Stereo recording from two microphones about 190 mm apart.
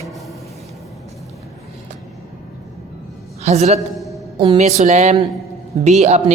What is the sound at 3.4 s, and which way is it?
A man's voice, 35° right (ahead or behind).